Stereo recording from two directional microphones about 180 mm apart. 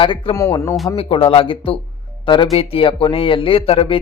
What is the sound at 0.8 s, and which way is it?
A man's voice, 30° left (ahead or behind).